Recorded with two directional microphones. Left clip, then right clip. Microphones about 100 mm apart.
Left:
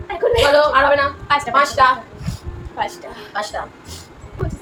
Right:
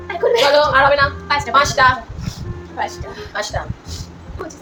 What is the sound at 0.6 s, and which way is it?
Speech, 45° right (ahead or behind).